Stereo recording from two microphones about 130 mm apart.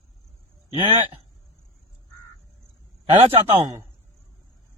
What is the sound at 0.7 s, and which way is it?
Speech, 50° right (ahead or behind).